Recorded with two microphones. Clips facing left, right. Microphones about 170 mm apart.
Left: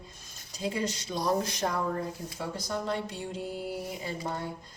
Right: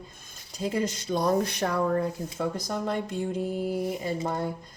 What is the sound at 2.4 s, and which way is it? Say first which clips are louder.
Speech: right 4 dB; 50° right (ahead or behind).